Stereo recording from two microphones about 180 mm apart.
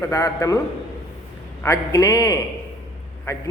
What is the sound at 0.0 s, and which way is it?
Speech, 15° left (ahead or behind).